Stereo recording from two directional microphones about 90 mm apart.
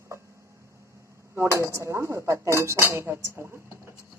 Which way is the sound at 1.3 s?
30° right (ahead or behind).